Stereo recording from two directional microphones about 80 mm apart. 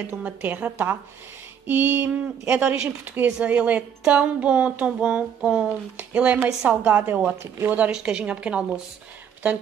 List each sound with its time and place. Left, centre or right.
0.2 s a woman's voice: centre
2.4 s a woman's voice: centre